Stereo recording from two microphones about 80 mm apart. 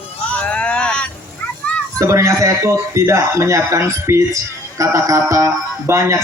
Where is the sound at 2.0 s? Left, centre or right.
Right.